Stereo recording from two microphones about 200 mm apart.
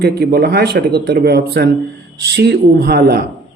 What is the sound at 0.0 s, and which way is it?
Speech, 55° right (ahead or behind).